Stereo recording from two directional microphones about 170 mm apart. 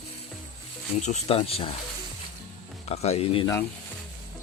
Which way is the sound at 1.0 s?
40° left (ahead or behind).